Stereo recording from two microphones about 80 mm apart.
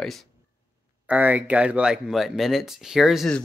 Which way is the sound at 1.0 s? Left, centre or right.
Centre.